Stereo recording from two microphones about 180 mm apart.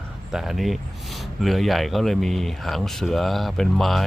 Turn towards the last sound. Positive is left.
turn(degrees=0)  # may be behind; listen again after turning